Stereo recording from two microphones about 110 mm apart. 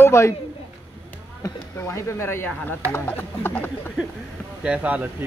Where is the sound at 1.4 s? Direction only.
25° left (ahead or behind).